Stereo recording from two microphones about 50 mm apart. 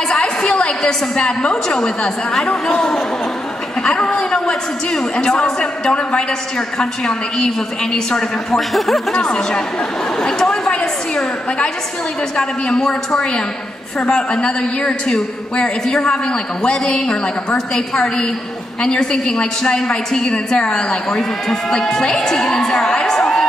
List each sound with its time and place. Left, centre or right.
0.2 s a woman's voice: centre
8.5 s speech: centre
9.1 s a woman's voice: centre
10.2 s a sound: centre
12.4 s a woman's voice: centre